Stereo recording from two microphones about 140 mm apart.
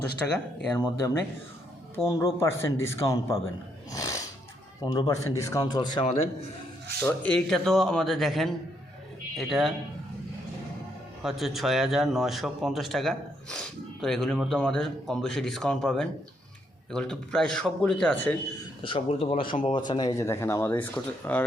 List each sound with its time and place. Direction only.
0.2 s speech: 10° left (ahead or behind)
2.0 s speech: 20° left (ahead or behind)
3.9 s music: 25° left (ahead or behind)
4.8 s speech: 25° left (ahead or behind)
7.0 s a man's voice: 10° left (ahead or behind)
11.2 s a man's voice: centre (ahead or behind)
18.8 s speech: 40° left (ahead or behind)
20.2 s speech: 20° left (ahead or behind)